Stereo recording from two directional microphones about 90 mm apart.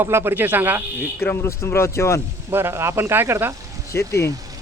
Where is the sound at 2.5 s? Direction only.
25° right (ahead or behind).